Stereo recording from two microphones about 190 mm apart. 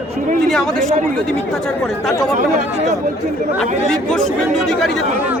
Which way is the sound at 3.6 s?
5° left (ahead or behind).